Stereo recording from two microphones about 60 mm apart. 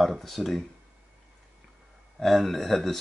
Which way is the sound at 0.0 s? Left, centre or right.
Centre.